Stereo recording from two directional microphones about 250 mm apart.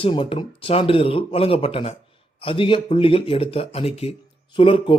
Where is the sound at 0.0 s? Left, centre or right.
Left.